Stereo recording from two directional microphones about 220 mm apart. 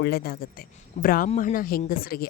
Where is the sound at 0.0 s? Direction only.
45° left (ahead or behind).